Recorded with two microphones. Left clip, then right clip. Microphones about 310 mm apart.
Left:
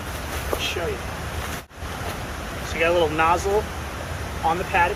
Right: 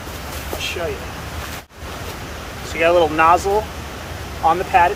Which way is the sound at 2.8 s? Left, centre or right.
Centre.